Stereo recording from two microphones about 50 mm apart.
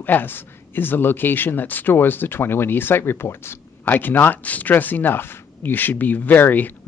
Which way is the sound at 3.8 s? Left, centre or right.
Left.